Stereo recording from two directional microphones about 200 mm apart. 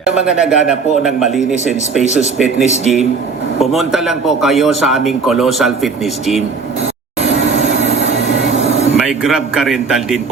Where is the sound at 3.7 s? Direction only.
Centre (ahead or behind).